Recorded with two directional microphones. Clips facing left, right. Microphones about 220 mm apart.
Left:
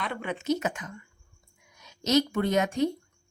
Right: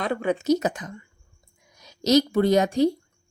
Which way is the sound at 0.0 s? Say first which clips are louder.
Right 8 dB; 40° right (ahead or behind).